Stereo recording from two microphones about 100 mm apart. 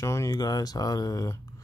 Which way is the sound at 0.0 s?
30° left (ahead or behind).